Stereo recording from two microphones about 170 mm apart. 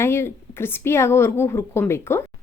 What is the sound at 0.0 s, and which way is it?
Speech, 15° left (ahead or behind).